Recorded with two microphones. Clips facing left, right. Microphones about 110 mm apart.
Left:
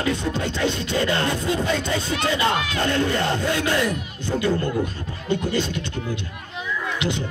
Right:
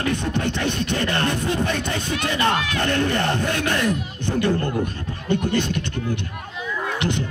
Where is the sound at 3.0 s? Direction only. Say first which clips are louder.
Right 1 dB; 55° right (ahead or behind).